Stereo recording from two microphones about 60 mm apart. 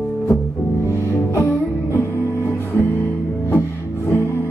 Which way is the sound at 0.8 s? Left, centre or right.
Left.